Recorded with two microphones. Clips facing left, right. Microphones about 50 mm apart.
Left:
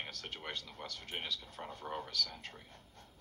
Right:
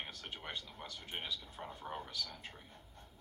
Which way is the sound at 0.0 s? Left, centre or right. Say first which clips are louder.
Left 2 dB; centre.